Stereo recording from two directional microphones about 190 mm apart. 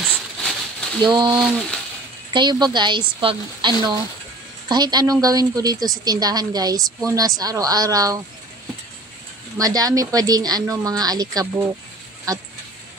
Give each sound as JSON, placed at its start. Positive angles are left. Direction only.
{"t": 0.0, "sound": "a sound", "side_deg": 5}
{"t": 1.0, "sound": "a woman's voice", "side_deg": -25}
{"t": 1.4, "sound": "speech", "side_deg": 0}
{"t": 2.3, "sound": "a woman's voice", "side_deg": -25}
{"t": 9.6, "sound": "a woman's voice", "side_deg": -20}